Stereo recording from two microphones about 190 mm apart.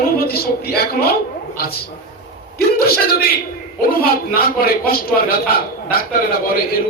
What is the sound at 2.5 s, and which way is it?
A man's voice, 50° left (ahead or behind).